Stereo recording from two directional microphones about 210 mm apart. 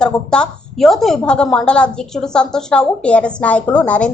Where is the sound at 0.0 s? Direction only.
5° left (ahead or behind).